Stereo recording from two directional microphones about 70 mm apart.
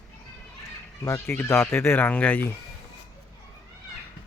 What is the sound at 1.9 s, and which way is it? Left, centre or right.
Speech, left.